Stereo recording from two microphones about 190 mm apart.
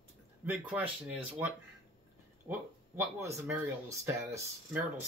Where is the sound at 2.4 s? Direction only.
15° right (ahead or behind).